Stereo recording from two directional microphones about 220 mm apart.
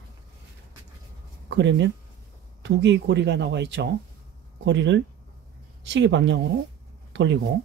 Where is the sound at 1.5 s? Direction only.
55° right (ahead or behind).